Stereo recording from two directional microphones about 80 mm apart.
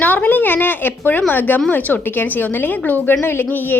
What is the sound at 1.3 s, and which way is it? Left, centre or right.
A woman's voice, left.